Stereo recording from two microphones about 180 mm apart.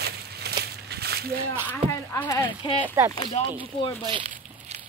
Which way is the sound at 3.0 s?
15° right (ahead or behind).